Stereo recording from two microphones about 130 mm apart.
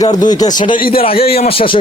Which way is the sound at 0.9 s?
45° left (ahead or behind).